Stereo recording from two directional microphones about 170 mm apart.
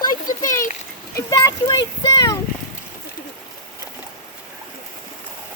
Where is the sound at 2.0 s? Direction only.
20° left (ahead or behind).